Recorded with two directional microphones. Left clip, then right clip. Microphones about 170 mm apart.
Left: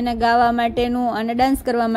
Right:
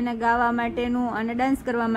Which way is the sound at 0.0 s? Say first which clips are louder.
Left 6 dB; 35° left (ahead or behind).